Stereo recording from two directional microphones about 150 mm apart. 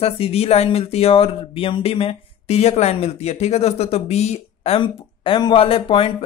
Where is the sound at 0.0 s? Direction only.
40° left (ahead or behind).